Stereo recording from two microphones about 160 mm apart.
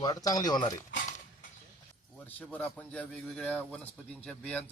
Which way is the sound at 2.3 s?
10° left (ahead or behind).